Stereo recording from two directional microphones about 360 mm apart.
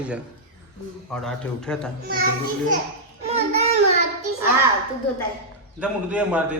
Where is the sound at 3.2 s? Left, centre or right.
Centre.